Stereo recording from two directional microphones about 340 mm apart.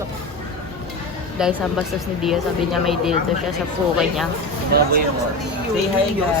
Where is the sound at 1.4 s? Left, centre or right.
Centre.